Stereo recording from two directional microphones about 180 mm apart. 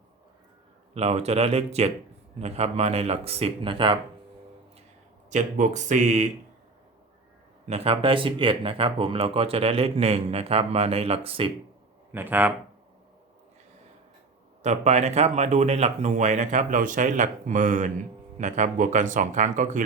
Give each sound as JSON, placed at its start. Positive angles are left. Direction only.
{"t": 0.9, "sound": "speech", "side_deg": -35}
{"t": 5.3, "sound": "speech", "side_deg": -40}
{"t": 7.7, "sound": "speech", "side_deg": -30}
{"t": 12.1, "sound": "speech", "side_deg": -10}
{"t": 14.6, "sound": "speech", "side_deg": -40}